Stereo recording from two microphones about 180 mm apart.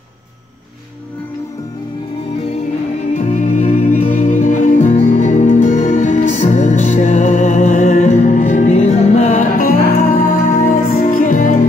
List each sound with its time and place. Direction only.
3.1 s music: 40° left (ahead or behind)